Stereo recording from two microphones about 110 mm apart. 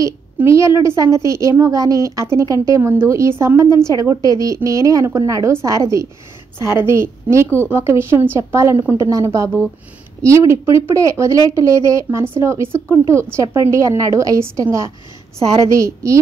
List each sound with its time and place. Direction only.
0.4 s a woman's voice: 25° right (ahead or behind)